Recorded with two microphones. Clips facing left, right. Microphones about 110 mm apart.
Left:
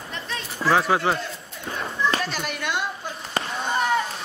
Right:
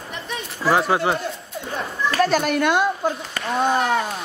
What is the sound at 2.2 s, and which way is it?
Speech, 50° right (ahead or behind).